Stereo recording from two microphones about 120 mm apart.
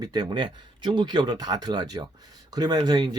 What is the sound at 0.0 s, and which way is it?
Speech, 40° right (ahead or behind).